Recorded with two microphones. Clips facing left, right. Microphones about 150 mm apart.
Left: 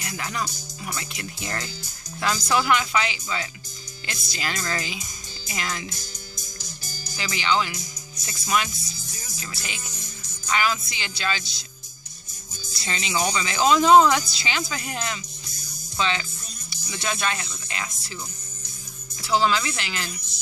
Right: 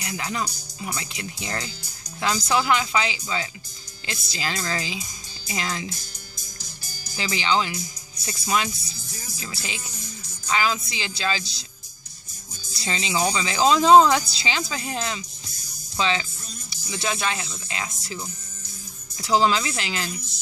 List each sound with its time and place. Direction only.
0.0 s speech: 20° right (ahead or behind)
7.2 s speech: 25° right (ahead or behind)
12.8 s speech: 25° right (ahead or behind)
13.2 s speech: 15° right (ahead or behind)
13.5 s speech: 30° right (ahead or behind)
19.3 s speech: 25° right (ahead or behind)